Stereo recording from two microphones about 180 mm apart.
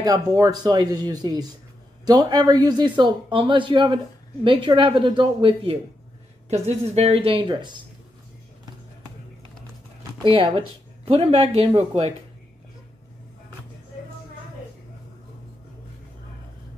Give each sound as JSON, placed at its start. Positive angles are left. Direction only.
{"t": 0.0, "sound": "speech", "side_deg": -20}
{"t": 10.2, "sound": "speech", "side_deg": -30}